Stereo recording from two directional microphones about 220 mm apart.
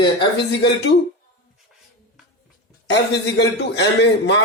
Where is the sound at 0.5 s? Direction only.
50° left (ahead or behind).